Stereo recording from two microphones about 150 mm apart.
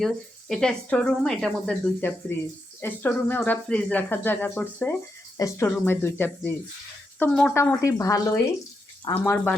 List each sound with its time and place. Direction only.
0.0 s speech: 5° left (ahead or behind)
7.5 s speech: 20° left (ahead or behind)
9.1 s speech: 10° left (ahead or behind)